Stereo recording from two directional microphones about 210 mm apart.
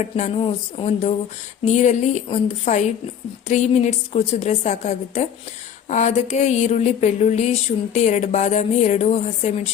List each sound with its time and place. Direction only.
0.0 s a woman's voice: 30° left (ahead or behind)